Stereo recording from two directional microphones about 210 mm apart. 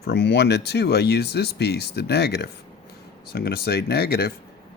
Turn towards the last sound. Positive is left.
turn(degrees=50)  # may be behind; listen again after turning